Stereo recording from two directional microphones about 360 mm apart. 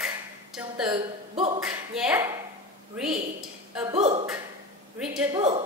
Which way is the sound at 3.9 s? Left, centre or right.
Centre.